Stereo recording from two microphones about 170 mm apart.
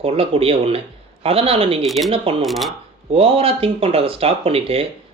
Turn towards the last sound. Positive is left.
turn(degrees=-35)  # may be behind; listen again after turning